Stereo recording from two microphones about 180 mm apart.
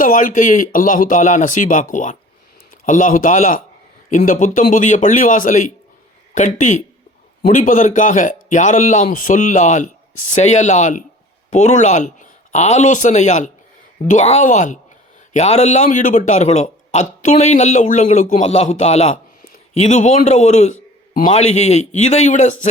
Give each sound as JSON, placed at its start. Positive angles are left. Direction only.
{"t": 0.0, "sound": "a man's voice", "side_deg": 45}
{"t": 21.2, "sound": "speech", "side_deg": 35}